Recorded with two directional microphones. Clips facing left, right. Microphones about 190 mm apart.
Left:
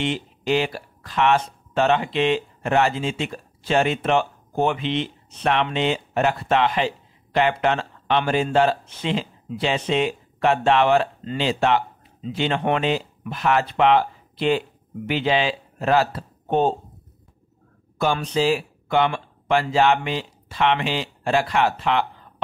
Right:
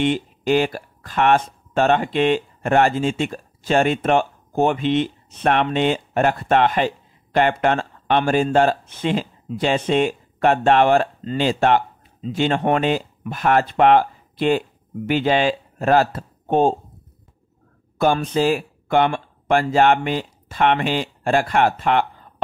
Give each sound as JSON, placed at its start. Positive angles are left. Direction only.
{"t": 0.0, "sound": "speech", "side_deg": -50}
{"t": 17.9, "sound": "speech", "side_deg": -50}